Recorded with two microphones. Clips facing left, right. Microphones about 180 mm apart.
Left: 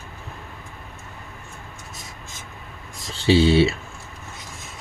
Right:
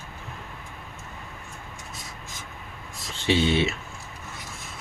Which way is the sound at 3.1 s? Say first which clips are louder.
Left 6 dB; 30° left (ahead or behind).